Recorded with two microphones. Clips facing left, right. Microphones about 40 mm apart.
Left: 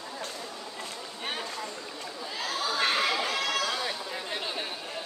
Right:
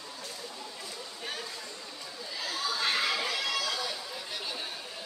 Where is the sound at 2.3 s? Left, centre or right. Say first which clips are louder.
Left 3 dB; left.